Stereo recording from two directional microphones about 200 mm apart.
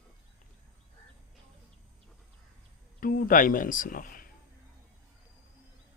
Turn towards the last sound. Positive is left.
turn(degrees=45)  # may be behind; listen again after turning